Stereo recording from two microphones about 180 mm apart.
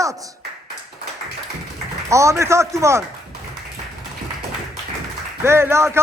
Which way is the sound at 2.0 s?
15° right (ahead or behind).